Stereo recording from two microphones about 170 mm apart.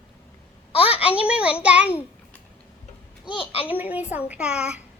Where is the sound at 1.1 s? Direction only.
10° right (ahead or behind).